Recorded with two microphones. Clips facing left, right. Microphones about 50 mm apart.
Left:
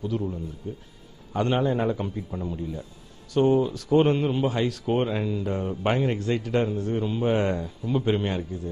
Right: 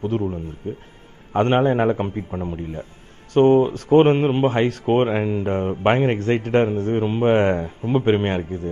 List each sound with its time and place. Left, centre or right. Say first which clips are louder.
0.0 s speech: right 6 dB; right